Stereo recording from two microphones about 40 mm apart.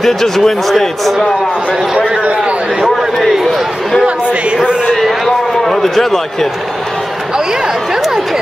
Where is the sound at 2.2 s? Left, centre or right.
Right.